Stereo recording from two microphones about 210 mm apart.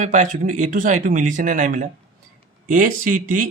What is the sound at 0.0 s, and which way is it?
Speech, 35° right (ahead or behind).